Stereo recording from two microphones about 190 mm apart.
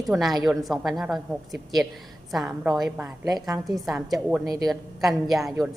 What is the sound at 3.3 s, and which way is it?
Speech, 20° right (ahead or behind).